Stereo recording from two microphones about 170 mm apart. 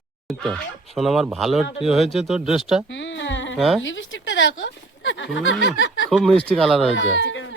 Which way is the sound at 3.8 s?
90° left.